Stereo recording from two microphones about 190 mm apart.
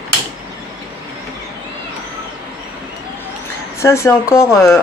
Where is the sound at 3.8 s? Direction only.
15° left (ahead or behind).